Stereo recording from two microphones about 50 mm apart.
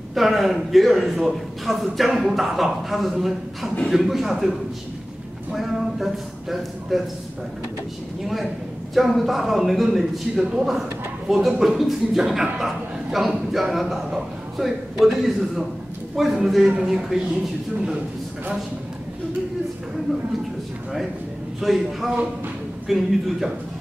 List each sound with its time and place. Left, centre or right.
0.1 s a man's voice: centre
8.9 s a man's voice: centre
17.7 s a man's voice: right
21.5 s a man's voice: centre